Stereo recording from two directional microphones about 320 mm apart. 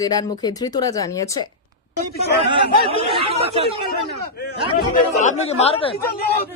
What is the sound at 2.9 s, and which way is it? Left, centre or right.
Speech, centre.